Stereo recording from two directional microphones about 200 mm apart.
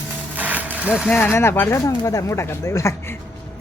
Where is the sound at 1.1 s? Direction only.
10° left (ahead or behind).